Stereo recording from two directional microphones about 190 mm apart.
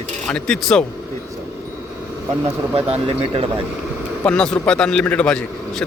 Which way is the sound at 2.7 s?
30° right (ahead or behind).